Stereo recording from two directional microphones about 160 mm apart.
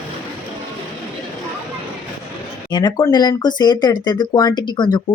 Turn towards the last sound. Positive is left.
turn(degrees=25)  # may be behind; listen again after turning